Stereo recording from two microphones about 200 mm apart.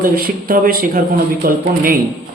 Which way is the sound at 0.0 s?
45° right (ahead or behind).